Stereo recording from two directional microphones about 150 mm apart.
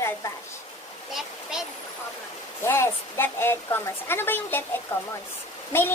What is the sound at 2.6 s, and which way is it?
A woman's voice, 15° left (ahead or behind).